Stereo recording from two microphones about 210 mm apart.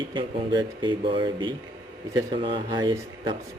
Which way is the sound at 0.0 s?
20° right (ahead or behind).